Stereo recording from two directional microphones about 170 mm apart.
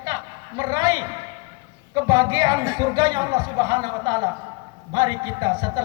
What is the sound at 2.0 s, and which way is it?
Speech, 25° right (ahead or behind).